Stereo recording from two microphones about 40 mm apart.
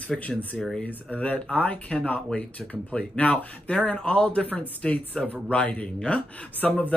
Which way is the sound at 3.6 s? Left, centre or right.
Left.